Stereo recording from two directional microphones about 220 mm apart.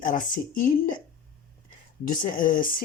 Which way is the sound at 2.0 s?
35° left (ahead or behind).